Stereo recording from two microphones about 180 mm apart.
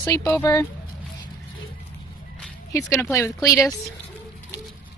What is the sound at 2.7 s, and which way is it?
Speech, 15° left (ahead or behind).